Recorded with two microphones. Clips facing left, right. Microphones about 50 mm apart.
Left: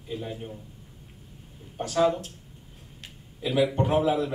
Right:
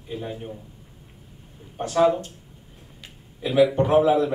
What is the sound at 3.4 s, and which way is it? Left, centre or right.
Speech, centre.